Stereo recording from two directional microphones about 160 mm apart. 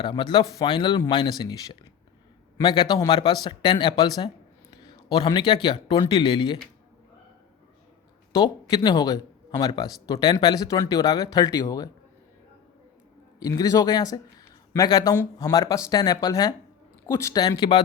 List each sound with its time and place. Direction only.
0.0 s a man's voice: 30° left (ahead or behind)
8.4 s speech: 25° left (ahead or behind)
13.4 s speech: 20° left (ahead or behind)